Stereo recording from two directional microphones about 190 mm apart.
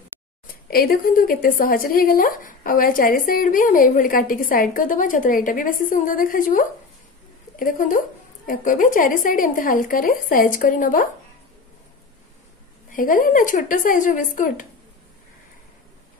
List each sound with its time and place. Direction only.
0.7 s a woman's voice: 50° left (ahead or behind)
12.9 s a woman's voice: 45° left (ahead or behind)